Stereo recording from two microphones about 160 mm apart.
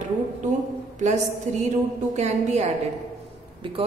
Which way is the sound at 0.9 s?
45° right (ahead or behind).